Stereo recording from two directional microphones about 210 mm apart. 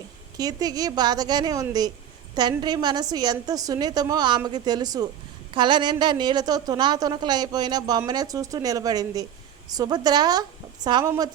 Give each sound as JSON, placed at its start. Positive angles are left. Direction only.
{"t": 0.3, "sound": "a woman's voice", "side_deg": -15}